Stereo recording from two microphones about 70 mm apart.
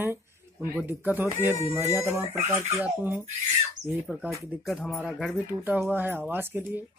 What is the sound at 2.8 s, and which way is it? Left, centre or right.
Speech, right.